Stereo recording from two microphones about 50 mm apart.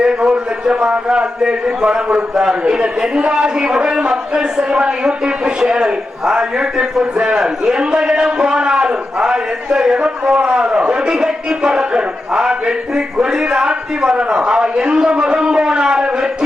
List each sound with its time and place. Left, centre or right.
0.0 s a man's voice: centre